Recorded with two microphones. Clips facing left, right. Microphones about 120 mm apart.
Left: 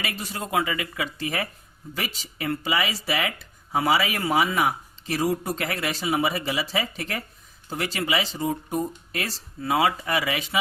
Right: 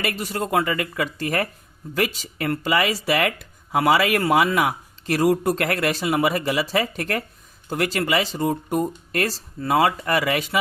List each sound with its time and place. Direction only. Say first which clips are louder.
0.0 s speech: right 6 dB; 50° right (ahead or behind)